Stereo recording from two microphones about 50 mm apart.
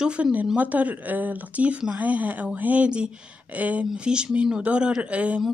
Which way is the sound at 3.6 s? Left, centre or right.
Right.